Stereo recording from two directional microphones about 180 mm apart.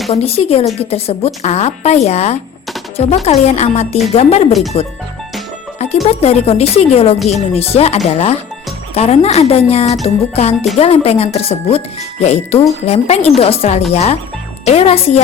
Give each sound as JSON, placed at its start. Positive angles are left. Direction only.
{"t": 0.1, "sound": "speech", "side_deg": 35}
{"t": 6.1, "sound": "speech", "side_deg": 35}